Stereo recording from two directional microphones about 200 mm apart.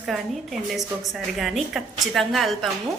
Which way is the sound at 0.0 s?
Centre (ahead or behind).